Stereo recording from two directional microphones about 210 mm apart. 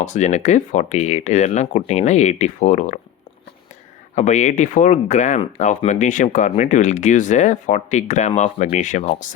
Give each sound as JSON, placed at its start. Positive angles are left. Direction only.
{"t": 0.0, "sound": "speech", "side_deg": 35}
{"t": 4.1, "sound": "speech", "side_deg": 35}